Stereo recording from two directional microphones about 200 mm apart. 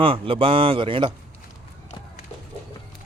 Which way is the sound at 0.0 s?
25° right (ahead or behind).